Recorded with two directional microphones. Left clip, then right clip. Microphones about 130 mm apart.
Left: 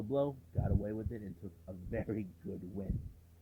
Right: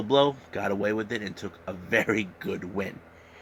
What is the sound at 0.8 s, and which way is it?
Speech, 25° right (ahead or behind).